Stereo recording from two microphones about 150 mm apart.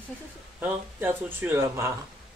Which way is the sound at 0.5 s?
10° right (ahead or behind).